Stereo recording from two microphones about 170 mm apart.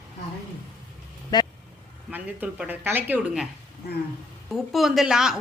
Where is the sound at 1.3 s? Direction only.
20° left (ahead or behind).